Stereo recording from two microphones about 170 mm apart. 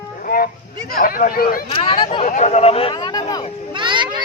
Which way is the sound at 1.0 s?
55° left (ahead or behind).